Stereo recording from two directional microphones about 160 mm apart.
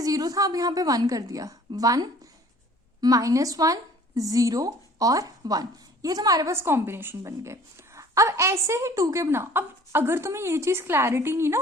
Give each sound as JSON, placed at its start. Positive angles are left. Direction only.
{"t": 0.0, "sound": "a woman's voice", "side_deg": -20}